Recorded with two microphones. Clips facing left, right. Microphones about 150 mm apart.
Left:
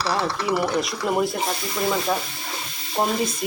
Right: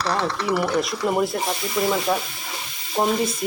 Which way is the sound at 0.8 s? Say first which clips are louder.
Right 1 dB; centre (ahead or behind).